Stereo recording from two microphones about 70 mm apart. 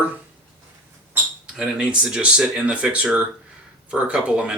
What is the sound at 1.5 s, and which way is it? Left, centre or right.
Speech, centre.